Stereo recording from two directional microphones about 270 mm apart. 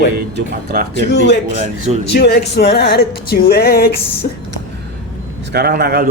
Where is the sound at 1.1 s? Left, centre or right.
Left.